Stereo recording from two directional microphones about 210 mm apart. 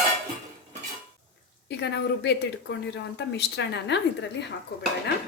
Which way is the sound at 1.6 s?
55° left (ahead or behind).